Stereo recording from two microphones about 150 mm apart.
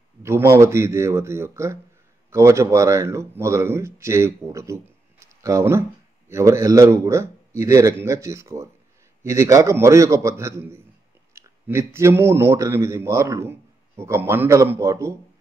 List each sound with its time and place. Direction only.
0.2 s speech: 15° right (ahead or behind)